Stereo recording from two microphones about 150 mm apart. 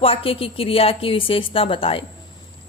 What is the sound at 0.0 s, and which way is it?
A woman's voice, 40° left (ahead or behind).